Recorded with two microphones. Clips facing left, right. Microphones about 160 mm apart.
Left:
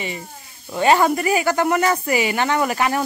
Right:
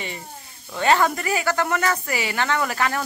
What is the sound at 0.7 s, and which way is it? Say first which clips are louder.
Speech: left 3 dB; 15° left (ahead or behind).